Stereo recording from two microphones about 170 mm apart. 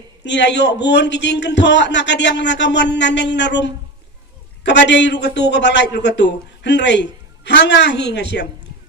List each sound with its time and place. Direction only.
0.3 s a man's voice: 90° left